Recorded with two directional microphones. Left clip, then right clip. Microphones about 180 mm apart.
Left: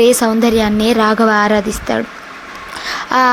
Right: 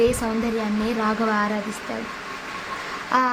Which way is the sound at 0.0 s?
45° left (ahead or behind).